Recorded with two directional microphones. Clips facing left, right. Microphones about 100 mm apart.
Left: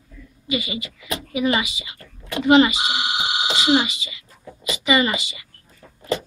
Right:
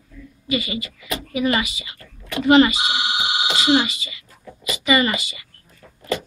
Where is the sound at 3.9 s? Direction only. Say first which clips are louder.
Even; 15° left (ahead or behind).